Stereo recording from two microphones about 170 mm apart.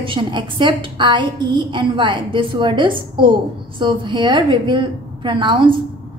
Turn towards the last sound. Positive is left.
turn(degrees=-30)  # may be behind; listen again after turning